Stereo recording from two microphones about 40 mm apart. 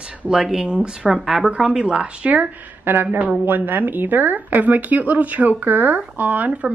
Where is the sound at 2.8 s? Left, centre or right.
Right.